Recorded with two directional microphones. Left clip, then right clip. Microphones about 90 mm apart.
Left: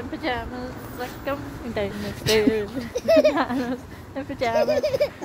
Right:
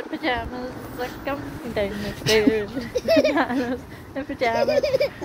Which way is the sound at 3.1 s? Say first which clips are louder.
Left 2 dB; 90° left.